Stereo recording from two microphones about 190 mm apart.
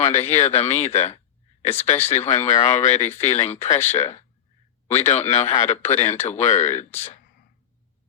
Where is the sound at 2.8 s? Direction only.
35° left (ahead or behind).